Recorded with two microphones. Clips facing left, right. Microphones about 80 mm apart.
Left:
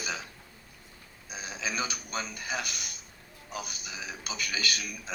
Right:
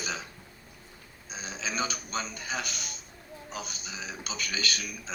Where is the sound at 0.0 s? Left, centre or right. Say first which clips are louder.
Even; right.